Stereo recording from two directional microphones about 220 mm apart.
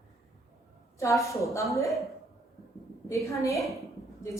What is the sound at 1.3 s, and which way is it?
Speech, 15° left (ahead or behind).